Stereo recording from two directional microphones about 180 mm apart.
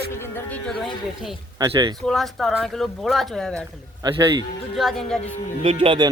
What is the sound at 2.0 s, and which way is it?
Speech, centre (ahead or behind).